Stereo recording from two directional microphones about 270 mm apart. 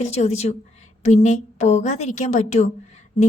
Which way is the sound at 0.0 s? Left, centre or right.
Left.